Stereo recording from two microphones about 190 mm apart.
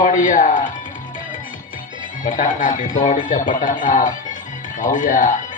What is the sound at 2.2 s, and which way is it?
Speech, 45° left (ahead or behind).